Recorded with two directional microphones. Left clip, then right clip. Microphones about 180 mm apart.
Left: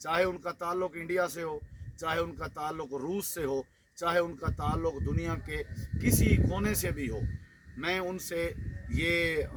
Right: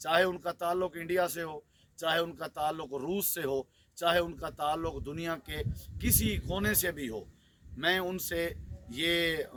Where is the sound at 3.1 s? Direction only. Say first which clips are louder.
Right 1 dB; 30° right (ahead or behind).